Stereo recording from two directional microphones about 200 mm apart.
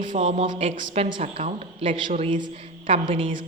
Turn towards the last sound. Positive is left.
turn(degrees=-25)  # may be behind; listen again after turning